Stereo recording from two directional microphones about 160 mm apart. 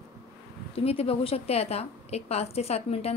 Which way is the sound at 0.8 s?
40° left (ahead or behind).